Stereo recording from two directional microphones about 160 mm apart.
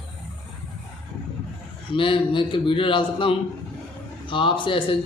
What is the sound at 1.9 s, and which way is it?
A man's voice, 35° left (ahead or behind).